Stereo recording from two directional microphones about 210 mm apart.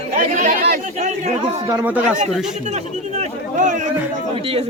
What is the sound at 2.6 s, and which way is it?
Speech, 35° right (ahead or behind).